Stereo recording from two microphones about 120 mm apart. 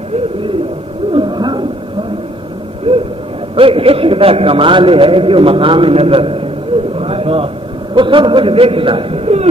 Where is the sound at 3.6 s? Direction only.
50° right (ahead or behind).